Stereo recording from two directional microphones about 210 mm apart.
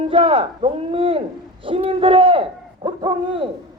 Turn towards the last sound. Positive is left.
turn(degrees=-25)  # may be behind; listen again after turning